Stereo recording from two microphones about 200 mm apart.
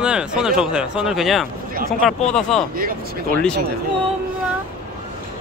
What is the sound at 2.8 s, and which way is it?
Speech, 45° right (ahead or behind).